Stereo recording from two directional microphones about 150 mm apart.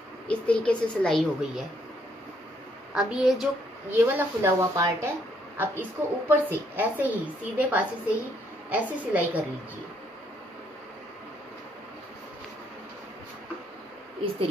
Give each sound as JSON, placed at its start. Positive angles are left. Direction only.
{"t": 0.3, "sound": "speech", "side_deg": 5}
{"t": 2.9, "sound": "a woman's voice", "side_deg": -5}
{"t": 3.9, "sound": "a woman's voice", "side_deg": -15}